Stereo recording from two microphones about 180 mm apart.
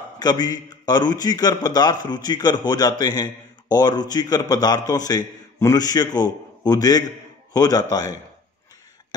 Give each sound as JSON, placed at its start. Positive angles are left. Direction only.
{"t": 0.2, "sound": "a man's voice", "side_deg": 20}